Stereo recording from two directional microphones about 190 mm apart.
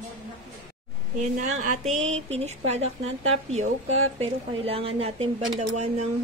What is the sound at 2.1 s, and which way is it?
Speech, 35° right (ahead or behind).